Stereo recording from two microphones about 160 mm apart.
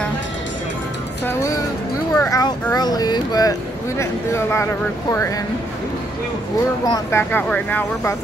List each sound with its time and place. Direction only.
1.2 s speech: 15° left (ahead or behind)
6.9 s speech: 15° left (ahead or behind)